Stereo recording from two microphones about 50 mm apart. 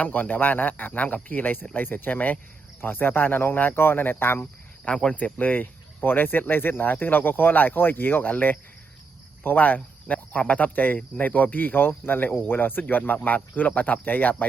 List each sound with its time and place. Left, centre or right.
0.0 s speech: left